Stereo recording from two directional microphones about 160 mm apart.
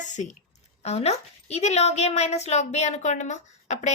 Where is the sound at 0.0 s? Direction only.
50° left (ahead or behind).